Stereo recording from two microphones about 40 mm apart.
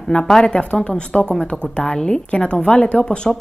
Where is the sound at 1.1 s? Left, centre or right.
Centre.